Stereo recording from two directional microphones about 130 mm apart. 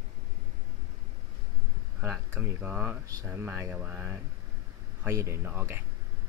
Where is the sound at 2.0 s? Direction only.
20° right (ahead or behind).